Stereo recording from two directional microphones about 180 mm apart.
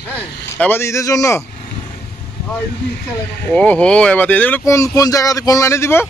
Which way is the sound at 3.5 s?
5° left (ahead or behind).